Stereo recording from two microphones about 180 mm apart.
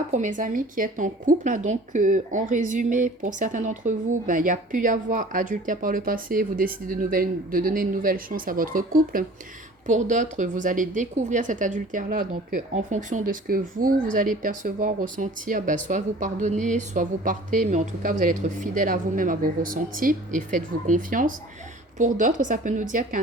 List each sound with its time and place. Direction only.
0.1 s a woman's voice: 45° right (ahead or behind)